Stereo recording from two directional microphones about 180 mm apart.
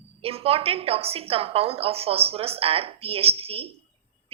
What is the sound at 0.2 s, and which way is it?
A woman's voice, 35° right (ahead or behind).